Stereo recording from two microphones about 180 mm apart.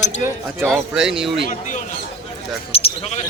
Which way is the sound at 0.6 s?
Centre (ahead or behind).